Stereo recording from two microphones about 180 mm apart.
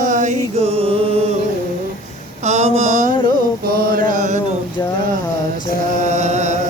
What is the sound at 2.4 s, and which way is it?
Mantra, 40° right (ahead or behind).